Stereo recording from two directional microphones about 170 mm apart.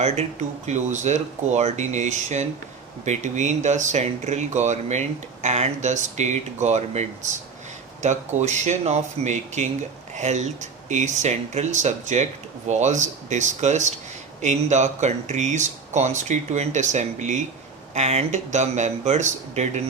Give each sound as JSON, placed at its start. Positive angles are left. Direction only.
{"t": 0.0, "sound": "speech", "side_deg": -40}